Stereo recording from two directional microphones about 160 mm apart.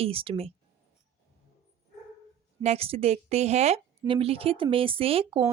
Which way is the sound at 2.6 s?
40° right (ahead or behind).